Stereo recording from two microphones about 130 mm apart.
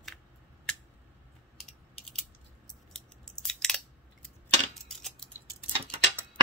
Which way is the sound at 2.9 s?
5° left (ahead or behind).